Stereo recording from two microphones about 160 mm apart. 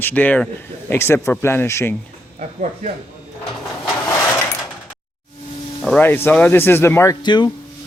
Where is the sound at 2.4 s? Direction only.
50° right (ahead or behind).